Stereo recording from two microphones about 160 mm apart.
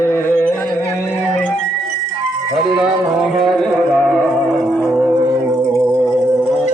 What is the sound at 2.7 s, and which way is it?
Music, centre (ahead or behind).